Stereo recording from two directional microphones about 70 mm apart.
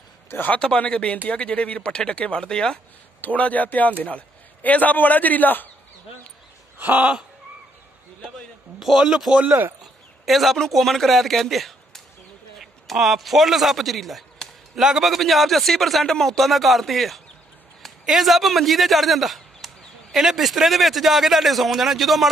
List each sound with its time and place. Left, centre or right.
0.3 s a man's voice: left
0.7 s a man's voice: centre
3.2 s a man's voice: left
6.8 s a sound: right
8.7 s a man's voice: centre
9.5 s a sound: right
10.2 s a man's voice: centre